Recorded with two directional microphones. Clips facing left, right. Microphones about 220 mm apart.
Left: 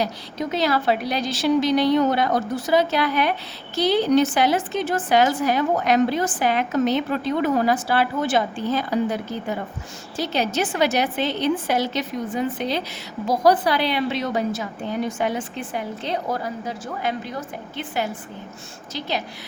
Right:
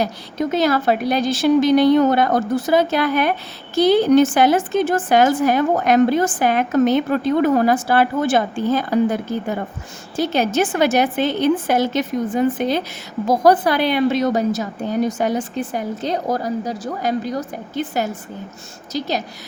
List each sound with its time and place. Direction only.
0.0 s a woman's voice: 50° right (ahead or behind)